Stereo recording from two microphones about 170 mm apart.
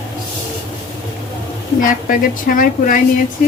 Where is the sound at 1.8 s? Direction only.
55° left (ahead or behind).